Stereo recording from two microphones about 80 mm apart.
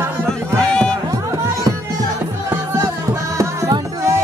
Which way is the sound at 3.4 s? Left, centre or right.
Right.